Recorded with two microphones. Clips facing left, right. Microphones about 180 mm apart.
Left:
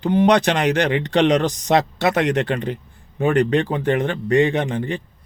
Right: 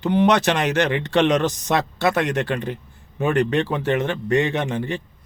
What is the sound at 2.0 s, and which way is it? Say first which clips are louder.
A man's voice: left 2 dB; 60° left (ahead or behind).